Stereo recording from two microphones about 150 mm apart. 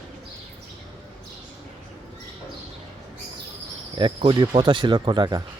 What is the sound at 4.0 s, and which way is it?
Speech, 35° right (ahead or behind).